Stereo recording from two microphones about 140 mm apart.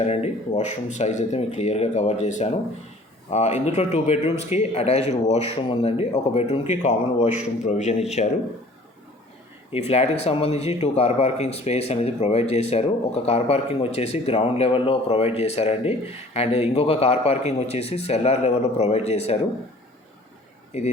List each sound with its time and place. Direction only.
0.0 s speech: 50° left (ahead or behind)
9.7 s speech: 50° left (ahead or behind)